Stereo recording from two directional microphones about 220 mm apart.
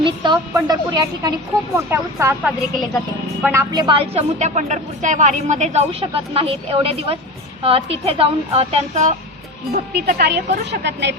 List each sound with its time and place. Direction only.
0.0 s a woman's voice: 20° right (ahead or behind)
9.7 s speech: 45° right (ahead or behind)